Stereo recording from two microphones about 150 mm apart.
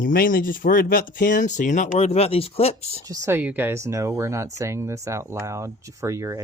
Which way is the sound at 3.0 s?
20° right (ahead or behind).